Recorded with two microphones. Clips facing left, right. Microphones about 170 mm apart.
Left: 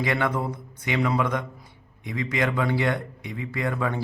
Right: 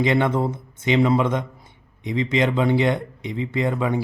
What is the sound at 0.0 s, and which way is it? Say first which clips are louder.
Speech: right 6 dB; 20° right (ahead or behind).